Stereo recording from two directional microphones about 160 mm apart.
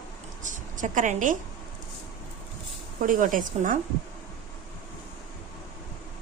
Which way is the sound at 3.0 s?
55° right (ahead or behind).